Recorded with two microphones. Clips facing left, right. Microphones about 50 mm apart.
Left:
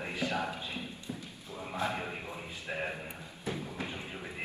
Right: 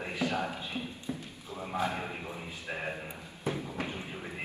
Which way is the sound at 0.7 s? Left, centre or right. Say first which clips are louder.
Right 3 dB; right.